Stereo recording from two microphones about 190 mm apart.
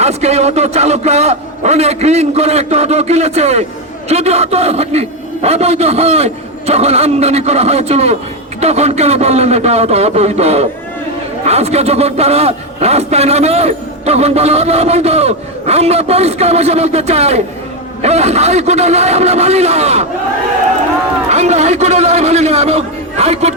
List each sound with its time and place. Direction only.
0.0 s a man's voice: 35° right (ahead or behind)
21.2 s a man's voice: 35° right (ahead or behind)